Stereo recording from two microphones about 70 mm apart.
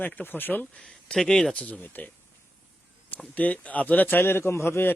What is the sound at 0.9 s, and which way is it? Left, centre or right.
Speech, centre.